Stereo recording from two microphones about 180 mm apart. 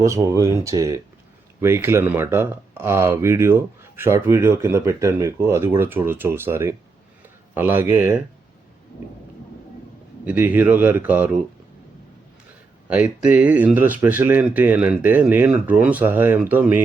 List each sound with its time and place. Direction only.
0.0 s speech: 15° right (ahead or behind)
10.2 s speech: 10° right (ahead or behind)
12.9 s speech: 5° right (ahead or behind)